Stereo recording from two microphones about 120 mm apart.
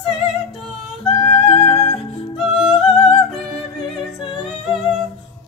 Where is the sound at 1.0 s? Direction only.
60° left (ahead or behind).